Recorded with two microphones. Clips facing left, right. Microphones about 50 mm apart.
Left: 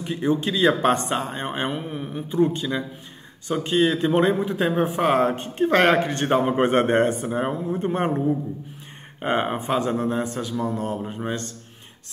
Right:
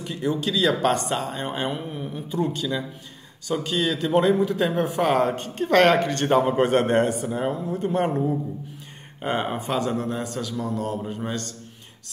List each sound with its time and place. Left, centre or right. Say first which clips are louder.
0.0 s speech: left 3 dB; left
9.2 s speech: left 2 dB; left